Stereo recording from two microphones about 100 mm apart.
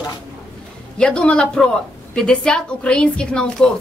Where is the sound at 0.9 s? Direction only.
10° left (ahead or behind).